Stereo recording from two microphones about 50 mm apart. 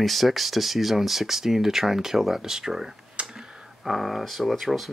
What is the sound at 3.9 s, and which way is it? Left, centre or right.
Speech, centre.